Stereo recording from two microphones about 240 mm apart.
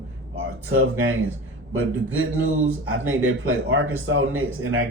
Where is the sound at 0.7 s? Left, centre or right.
Right.